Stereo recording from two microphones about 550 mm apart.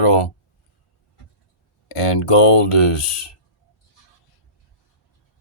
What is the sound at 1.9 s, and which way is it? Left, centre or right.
Speech, left.